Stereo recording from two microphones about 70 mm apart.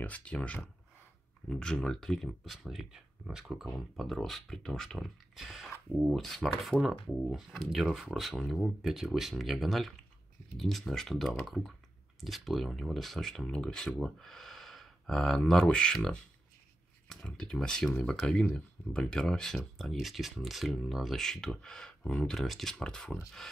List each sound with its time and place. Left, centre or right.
0.0 s speech: centre